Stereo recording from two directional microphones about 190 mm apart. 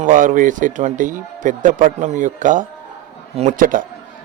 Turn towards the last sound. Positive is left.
turn(degrees=-45)  # may be behind; listen again after turning